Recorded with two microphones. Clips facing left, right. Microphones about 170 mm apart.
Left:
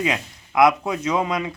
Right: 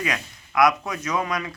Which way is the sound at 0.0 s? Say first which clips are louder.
Left 4 dB; 25° left (ahead or behind).